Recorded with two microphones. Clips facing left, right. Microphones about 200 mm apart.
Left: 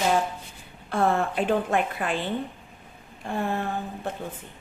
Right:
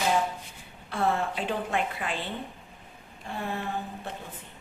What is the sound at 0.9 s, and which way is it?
A woman's voice, 50° left (ahead or behind).